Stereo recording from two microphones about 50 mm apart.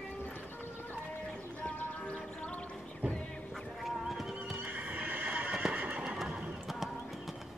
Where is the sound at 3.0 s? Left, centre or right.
Right.